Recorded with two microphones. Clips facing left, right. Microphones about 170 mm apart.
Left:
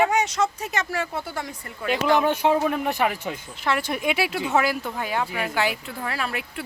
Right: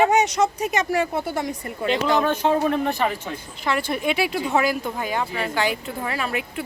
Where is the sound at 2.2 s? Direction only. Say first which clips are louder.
Right 1 dB; 10° left (ahead or behind).